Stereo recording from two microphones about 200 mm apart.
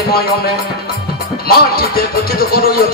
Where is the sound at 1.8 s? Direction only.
50° left (ahead or behind).